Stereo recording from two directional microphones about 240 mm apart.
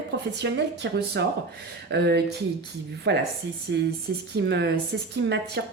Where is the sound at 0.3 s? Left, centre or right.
Right.